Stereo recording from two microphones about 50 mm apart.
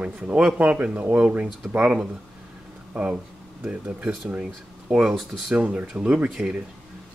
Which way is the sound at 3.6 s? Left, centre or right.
Right.